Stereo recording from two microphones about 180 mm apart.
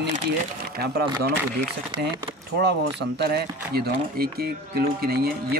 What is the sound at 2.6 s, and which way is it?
Speech, 65° right (ahead or behind).